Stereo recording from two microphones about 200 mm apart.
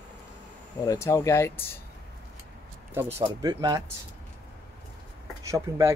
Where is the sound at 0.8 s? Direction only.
15° left (ahead or behind).